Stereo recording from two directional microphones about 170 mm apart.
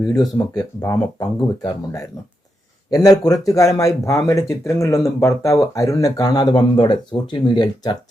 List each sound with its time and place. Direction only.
0.1 s speech: 20° left (ahead or behind)